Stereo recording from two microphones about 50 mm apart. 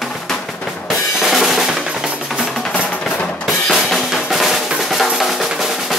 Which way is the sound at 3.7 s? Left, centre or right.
Centre.